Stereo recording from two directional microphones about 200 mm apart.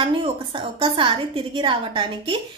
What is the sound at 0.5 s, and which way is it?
A woman's voice, 25° right (ahead or behind).